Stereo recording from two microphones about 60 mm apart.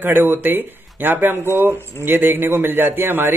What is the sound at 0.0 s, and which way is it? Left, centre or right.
Speech, right.